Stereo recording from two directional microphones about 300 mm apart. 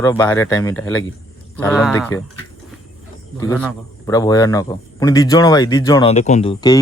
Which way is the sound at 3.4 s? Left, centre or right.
Centre.